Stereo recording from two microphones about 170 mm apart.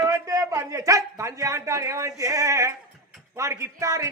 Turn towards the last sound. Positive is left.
turn(degrees=-20)  # may be behind; listen again after turning